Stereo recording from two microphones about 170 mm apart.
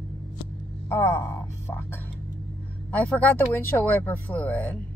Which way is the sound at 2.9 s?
10° left (ahead or behind).